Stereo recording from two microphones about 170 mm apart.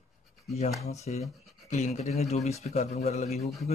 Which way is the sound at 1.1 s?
45° left (ahead or behind).